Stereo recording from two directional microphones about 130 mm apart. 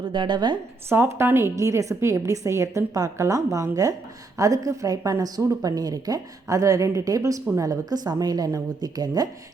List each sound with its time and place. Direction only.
0.0 s a woman's voice: 35° right (ahead or behind)
0.9 s a woman's voice: 20° right (ahead or behind)